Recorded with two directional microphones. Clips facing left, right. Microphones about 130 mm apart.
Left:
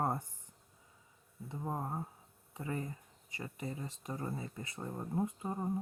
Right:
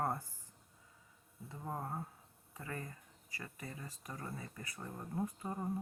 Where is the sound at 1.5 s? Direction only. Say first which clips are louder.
Left 3 dB; 20° left (ahead or behind).